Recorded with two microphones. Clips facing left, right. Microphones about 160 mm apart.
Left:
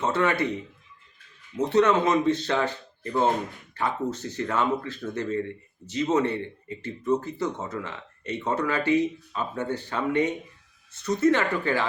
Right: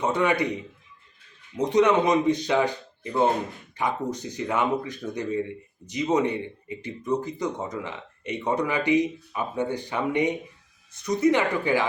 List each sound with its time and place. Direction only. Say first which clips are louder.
0.0 s speech: right 1 dB; 15° right (ahead or behind)